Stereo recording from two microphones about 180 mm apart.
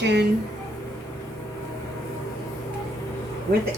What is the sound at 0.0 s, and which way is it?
Speech, 75° right (ahead or behind).